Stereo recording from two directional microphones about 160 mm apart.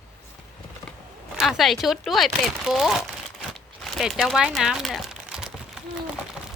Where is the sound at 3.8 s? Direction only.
Centre (ahead or behind).